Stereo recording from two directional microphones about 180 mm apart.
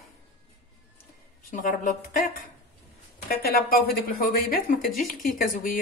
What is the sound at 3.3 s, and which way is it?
A woman's voice, 55° left (ahead or behind).